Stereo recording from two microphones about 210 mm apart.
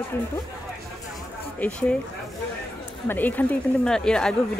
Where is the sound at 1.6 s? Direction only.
5° left (ahead or behind).